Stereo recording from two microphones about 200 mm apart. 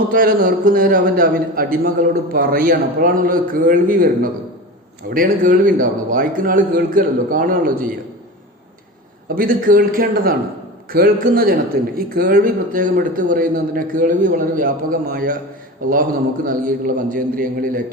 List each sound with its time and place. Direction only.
0.1 s a man's voice: 45° right (ahead or behind)
9.3 s a man's voice: 45° right (ahead or behind)
16.6 s a man's voice: 45° right (ahead or behind)